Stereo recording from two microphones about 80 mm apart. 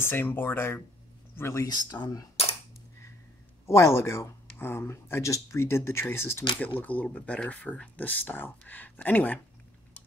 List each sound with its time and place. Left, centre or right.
0.0 s speech: left
2.0 s speech: left
3.6 s speech: left